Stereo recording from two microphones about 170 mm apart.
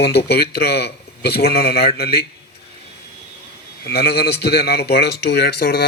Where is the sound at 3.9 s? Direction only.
70° left (ahead or behind).